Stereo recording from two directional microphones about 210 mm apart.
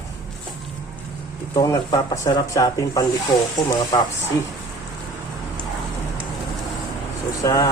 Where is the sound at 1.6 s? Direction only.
15° left (ahead or behind).